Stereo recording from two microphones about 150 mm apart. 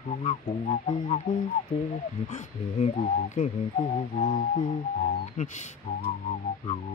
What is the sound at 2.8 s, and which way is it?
Music, 50° left (ahead or behind).